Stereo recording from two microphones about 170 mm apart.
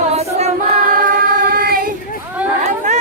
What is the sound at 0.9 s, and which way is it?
Singing, 55° right (ahead or behind).